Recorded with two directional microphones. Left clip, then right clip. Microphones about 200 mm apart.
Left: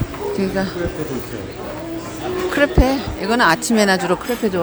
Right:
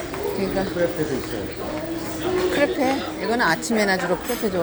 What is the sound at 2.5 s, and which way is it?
Speech, 30° left (ahead or behind).